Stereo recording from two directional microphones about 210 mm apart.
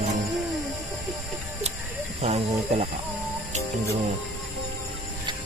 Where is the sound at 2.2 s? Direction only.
30° right (ahead or behind).